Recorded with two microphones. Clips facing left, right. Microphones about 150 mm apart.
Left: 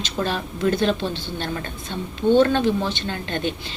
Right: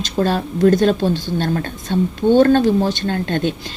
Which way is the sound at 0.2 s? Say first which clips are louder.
Right 8 dB; 45° right (ahead or behind).